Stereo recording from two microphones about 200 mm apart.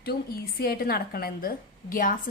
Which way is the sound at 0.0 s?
50° left (ahead or behind).